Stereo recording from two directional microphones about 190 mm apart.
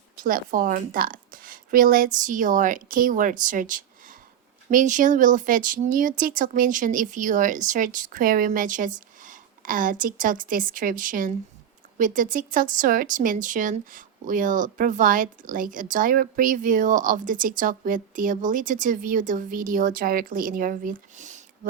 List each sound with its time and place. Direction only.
0.2 s a woman's voice: 45° right (ahead or behind)